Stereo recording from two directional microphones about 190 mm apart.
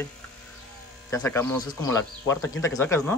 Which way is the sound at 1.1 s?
15° left (ahead or behind).